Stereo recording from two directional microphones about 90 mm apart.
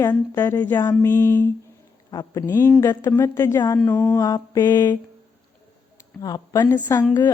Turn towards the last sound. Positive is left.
turn(degrees=35)  # may be behind; listen again after turning